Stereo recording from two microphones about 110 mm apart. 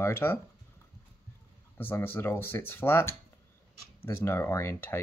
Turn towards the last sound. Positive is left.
turn(degrees=20)  # may be behind; listen again after turning